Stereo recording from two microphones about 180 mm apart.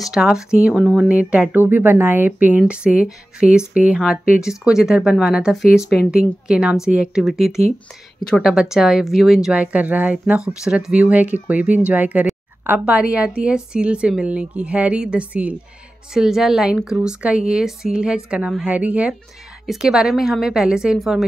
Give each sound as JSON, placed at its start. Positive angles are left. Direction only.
{"t": 0.0, "sound": "a woman's voice", "side_deg": -5}